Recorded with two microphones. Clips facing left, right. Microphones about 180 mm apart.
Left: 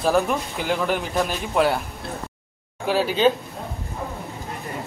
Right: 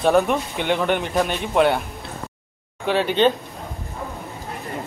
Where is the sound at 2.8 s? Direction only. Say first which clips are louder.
Right 1 dB; 5° left (ahead or behind).